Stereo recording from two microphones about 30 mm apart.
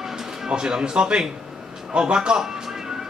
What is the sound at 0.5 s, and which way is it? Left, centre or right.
A man's voice, right.